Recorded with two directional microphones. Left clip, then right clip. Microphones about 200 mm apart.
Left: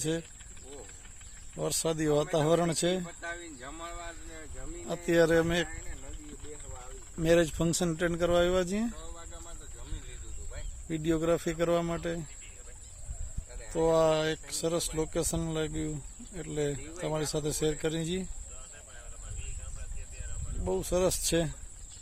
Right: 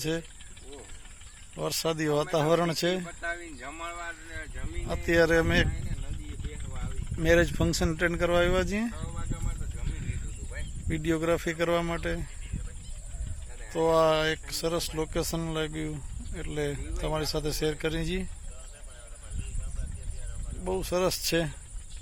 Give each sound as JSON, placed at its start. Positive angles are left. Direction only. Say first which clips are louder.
{"t": 1.6, "sound": "speech", "louder": "right 1 dB", "side_deg": 0}
{"t": 3.1, "sound": "a sound", "louder": "right 5 dB", "side_deg": -35}
{"t": 5.0, "sound": "speech", "louder": "right 2 dB", "side_deg": 0}
{"t": 7.2, "sound": "speech", "louder": "right 2 dB", "side_deg": 0}
{"t": 10.8, "sound": "speech", "louder": "right 1 dB", "side_deg": 0}
{"t": 13.7, "sound": "speech", "louder": "right 2 dB", "side_deg": 0}
{"t": 20.7, "sound": "speech", "louder": "right 1 dB", "side_deg": 0}